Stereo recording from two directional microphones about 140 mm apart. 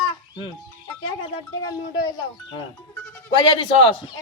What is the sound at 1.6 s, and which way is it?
Speech, 30° left (ahead or behind).